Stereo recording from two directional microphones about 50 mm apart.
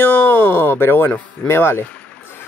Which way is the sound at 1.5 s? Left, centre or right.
Left.